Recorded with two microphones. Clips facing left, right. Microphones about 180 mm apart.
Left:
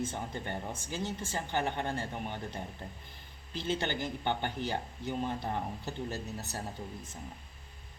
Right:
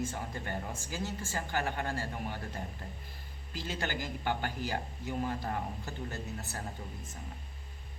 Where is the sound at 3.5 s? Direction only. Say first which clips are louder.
Left 4 dB; 25° left (ahead or behind).